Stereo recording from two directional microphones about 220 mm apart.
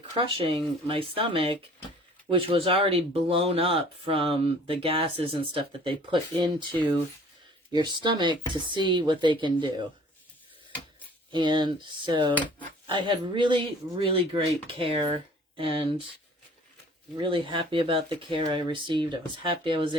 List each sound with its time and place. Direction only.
0.2 s speech: 25° right (ahead or behind)
7.7 s speech: 20° right (ahead or behind)
11.3 s speech: 20° right (ahead or behind)
17.2 s speech: 25° right (ahead or behind)